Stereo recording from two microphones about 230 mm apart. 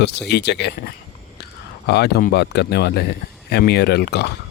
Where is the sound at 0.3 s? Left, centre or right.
Left.